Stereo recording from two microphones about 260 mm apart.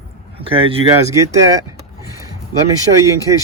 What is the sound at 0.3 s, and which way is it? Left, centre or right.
Speech, right.